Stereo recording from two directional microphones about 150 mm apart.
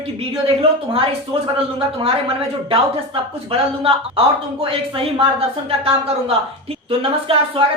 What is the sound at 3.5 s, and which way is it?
Speech, 40° right (ahead or behind).